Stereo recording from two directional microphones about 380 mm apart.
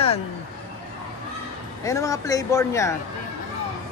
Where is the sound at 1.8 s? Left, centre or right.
Centre.